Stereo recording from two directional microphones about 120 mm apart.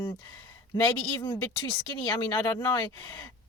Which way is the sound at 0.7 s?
35° left (ahead or behind).